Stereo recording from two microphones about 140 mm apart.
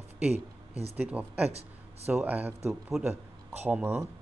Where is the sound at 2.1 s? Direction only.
10° right (ahead or behind).